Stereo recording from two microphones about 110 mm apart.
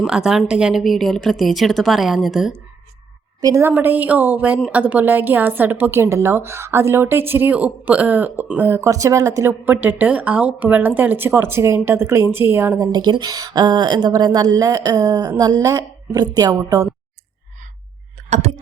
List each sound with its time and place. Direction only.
0.0 s a woman's voice: 5° right (ahead or behind)
3.4 s a woman's voice: 30° right (ahead or behind)
3.7 s a woman's voice: 15° right (ahead or behind)
12.8 s speech: 40° right (ahead or behind)